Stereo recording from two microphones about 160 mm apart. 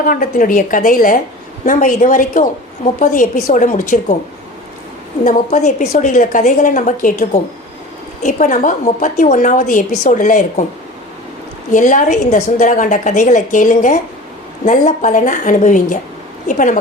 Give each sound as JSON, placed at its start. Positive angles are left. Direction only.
{"t": 0.0, "sound": "a woman's voice", "side_deg": 60}
{"t": 5.2, "sound": "a woman's voice", "side_deg": 50}
{"t": 11.7, "sound": "a woman's voice", "side_deg": 55}